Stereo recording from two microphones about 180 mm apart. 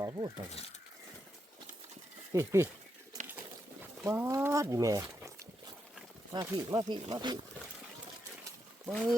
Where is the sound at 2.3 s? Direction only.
15° right (ahead or behind).